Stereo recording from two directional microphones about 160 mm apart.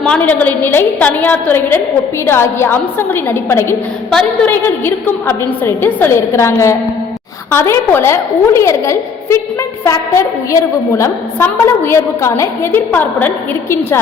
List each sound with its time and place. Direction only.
0.0 s a woman's voice: 10° left (ahead or behind)
4.1 s a woman's voice: centre (ahead or behind)